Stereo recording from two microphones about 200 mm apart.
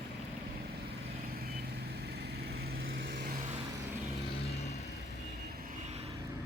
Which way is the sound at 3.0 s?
60° right (ahead or behind).